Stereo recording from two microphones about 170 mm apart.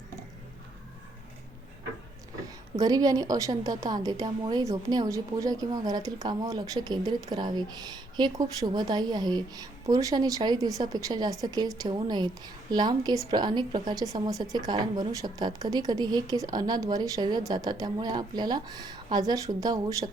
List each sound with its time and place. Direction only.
2.7 s a woman's voice: 20° right (ahead or behind)